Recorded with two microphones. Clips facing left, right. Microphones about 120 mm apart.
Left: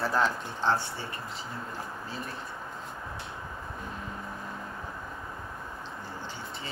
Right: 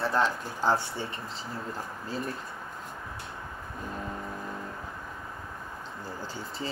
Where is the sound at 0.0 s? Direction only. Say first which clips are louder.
Right 1 dB; centre (ahead or behind).